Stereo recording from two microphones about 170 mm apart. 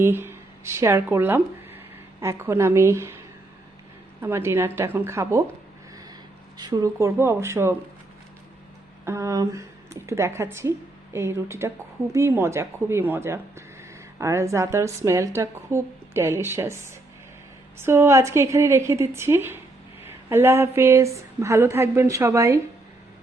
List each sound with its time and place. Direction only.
0.0 s a woman's voice: 15° right (ahead or behind)
4.2 s a woman's voice: 15° right (ahead or behind)
6.6 s a woman's voice: 25° right (ahead or behind)
9.0 s a woman's voice: 15° right (ahead or behind)
17.7 s a woman's voice: 15° right (ahead or behind)